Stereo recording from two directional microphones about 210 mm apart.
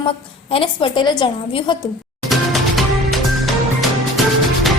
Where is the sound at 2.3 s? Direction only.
Centre (ahead or behind).